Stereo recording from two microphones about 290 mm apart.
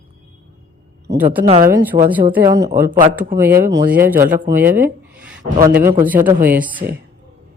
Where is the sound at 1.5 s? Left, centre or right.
Centre.